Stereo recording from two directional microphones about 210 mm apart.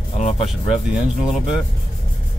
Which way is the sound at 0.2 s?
35° left (ahead or behind).